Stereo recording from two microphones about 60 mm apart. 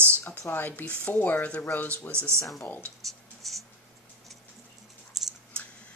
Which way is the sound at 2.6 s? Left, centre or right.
Left.